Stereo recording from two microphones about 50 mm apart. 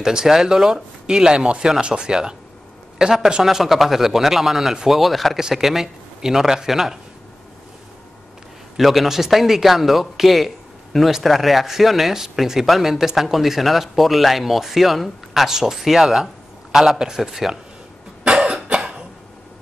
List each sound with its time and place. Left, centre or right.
0.0 s a man's voice: centre
8.7 s a man's voice: centre
18.2 s cough: centre